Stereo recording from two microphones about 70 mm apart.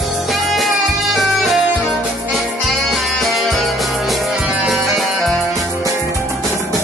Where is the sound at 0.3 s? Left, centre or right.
Centre.